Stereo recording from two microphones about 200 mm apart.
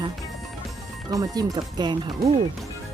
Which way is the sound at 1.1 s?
15° right (ahead or behind).